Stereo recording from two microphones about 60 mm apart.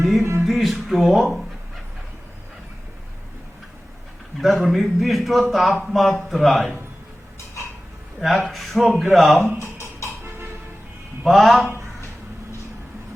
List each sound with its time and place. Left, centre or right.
0.2 s music: right
0.4 s a man's voice: centre
4.4 s a man's voice: centre
8.4 s a man's voice: centre
9.8 s music: right
11.3 s a man's voice: centre